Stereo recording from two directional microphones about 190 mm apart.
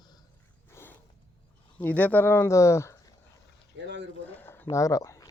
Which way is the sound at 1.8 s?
10° left (ahead or behind).